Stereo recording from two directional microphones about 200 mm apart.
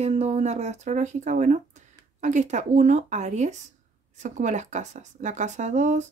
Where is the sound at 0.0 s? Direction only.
35° right (ahead or behind).